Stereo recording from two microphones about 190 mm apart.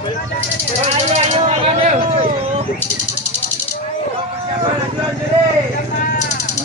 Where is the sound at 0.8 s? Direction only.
35° right (ahead or behind).